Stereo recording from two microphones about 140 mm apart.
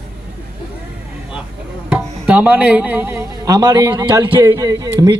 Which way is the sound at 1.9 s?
10° right (ahead or behind).